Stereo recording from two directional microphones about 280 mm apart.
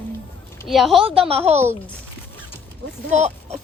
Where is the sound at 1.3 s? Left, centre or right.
Right.